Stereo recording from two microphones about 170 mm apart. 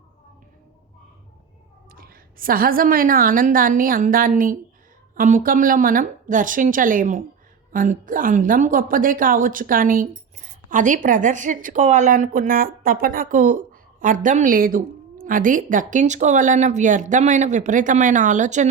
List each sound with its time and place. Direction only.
2.0 s a woman's voice: 60° right (ahead or behind)